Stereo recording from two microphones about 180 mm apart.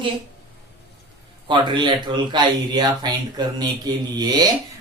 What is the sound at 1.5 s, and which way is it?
Speech, 25° right (ahead or behind).